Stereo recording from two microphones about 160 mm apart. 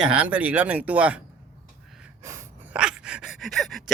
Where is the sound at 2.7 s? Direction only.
5° right (ahead or behind).